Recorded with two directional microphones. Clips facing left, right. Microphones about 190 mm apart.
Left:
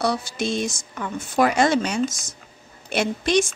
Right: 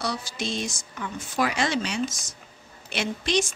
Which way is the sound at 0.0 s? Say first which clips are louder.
Left 7 dB; 50° left (ahead or behind).